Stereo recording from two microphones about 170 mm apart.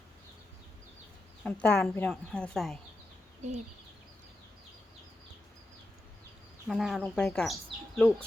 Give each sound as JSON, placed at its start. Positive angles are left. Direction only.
{"t": 1.6, "sound": "a woman's voice", "side_deg": 5}
{"t": 3.4, "sound": "speech", "side_deg": -40}
{"t": 6.7, "sound": "speech", "side_deg": 0}